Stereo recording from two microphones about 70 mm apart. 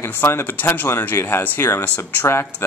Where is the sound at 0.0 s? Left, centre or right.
Left.